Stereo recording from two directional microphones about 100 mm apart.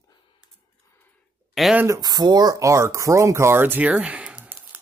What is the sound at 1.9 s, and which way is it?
Speech, 40° right (ahead or behind).